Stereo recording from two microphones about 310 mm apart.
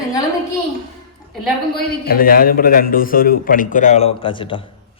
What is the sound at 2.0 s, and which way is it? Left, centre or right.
A man's voice, left.